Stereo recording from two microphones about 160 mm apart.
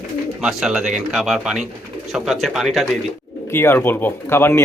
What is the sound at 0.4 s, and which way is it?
Speech, 5° right (ahead or behind).